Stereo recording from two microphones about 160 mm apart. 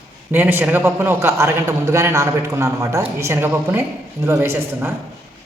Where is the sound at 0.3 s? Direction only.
10° right (ahead or behind).